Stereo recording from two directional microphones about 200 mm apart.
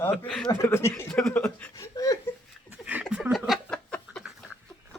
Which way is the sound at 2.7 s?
5° right (ahead or behind).